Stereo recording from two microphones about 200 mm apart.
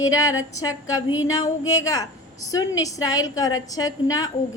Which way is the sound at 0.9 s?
80° left.